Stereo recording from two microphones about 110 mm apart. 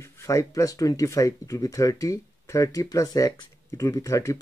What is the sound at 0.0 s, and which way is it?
Speech, 25° left (ahead or behind).